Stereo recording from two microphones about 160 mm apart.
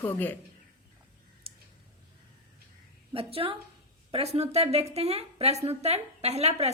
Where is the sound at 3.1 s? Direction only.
35° right (ahead or behind).